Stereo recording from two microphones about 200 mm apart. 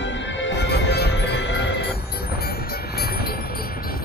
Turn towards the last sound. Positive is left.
turn(degrees=50)  # may be behind; listen again after turning